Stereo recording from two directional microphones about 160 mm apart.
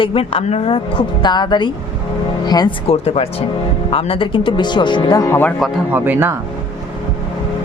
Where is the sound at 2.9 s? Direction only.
40° left (ahead or behind); by 5.5 s 15° left (ahead or behind).